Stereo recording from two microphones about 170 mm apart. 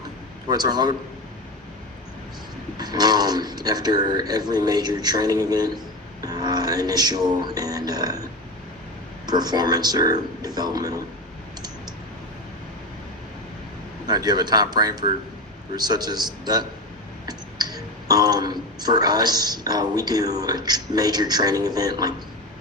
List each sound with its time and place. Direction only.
0.4 s a man's voice: 25° right (ahead or behind)
2.7 s a man's voice: 25° right (ahead or behind)
9.2 s a man's voice: 25° right (ahead or behind)
14.1 s a man's voice: 25° right (ahead or behind)